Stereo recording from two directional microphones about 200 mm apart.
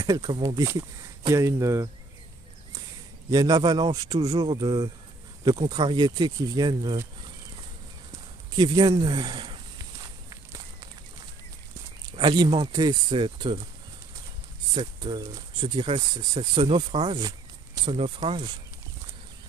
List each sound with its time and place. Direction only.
0.0 s speech: 20° right (ahead or behind)
3.3 s speech: 20° right (ahead or behind)
8.5 s speech: 20° right (ahead or behind)
10.3 s walk: 15° right (ahead or behind)
12.1 s speech: 20° right (ahead or behind)
14.7 s speech: 20° right (ahead or behind)